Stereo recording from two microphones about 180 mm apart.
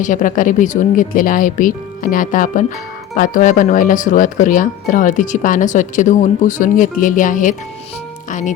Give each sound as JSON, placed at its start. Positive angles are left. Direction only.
{"t": 0.0, "sound": "speech", "side_deg": 45}